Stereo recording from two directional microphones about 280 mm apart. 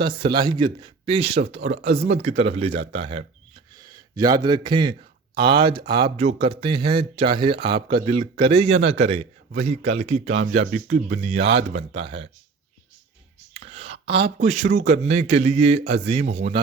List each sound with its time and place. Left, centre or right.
0.2 s speech: centre
13.5 s clicking: right
14.1 s speech: centre